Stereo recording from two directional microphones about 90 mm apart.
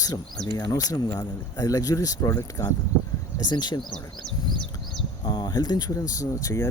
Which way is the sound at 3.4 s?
55° left (ahead or behind).